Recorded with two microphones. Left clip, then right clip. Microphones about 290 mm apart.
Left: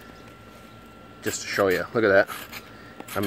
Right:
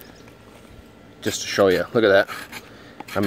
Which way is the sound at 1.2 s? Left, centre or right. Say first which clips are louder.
Right 5 dB; right.